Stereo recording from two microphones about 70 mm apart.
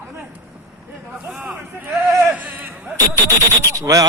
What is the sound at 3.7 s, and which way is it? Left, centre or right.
Speech, right.